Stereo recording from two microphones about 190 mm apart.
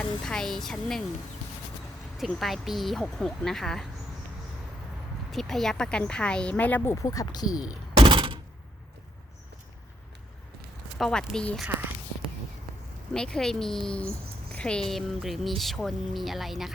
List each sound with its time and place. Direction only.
0.0 s speech: 5° left (ahead or behind)
2.1 s speech: centre (ahead or behind)
5.3 s speech: centre (ahead or behind); by 7.7 s 20° left (ahead or behind)
7.9 s a sound: 25° right (ahead or behind)
10.9 s speech: 5° left (ahead or behind)
13.1 s speech: 5° left (ahead or behind)